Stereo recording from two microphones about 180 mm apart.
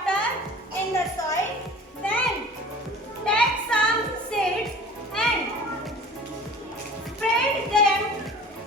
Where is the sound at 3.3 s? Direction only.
5° left (ahead or behind).